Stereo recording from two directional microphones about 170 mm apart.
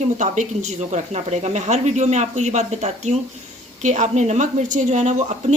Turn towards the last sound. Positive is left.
turn(degrees=-45)  # may be behind; listen again after turning